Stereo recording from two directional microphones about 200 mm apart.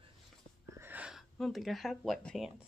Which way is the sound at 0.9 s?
5° right (ahead or behind).